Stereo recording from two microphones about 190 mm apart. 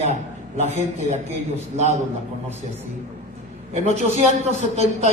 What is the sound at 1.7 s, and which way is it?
Speech, 35° right (ahead or behind).